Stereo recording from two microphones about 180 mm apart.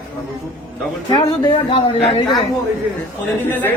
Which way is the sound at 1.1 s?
30° left (ahead or behind).